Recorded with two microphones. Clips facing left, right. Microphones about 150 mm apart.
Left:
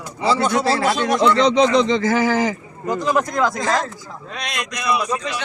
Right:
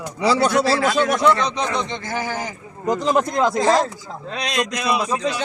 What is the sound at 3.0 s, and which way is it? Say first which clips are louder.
A man's voice: even; 25° right (ahead or behind).